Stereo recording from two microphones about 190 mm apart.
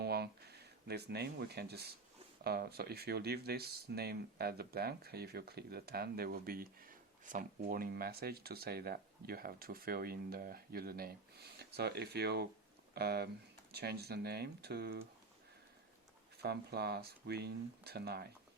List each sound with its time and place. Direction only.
0.0 s a sound: 60° right (ahead or behind)
2.4 s speech: 55° right (ahead or behind)
16.4 s speech: 55° right (ahead or behind)